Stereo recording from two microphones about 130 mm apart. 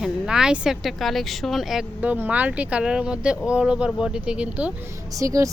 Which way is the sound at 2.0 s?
10° right (ahead or behind).